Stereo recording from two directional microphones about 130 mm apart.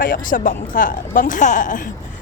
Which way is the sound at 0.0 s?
90° left.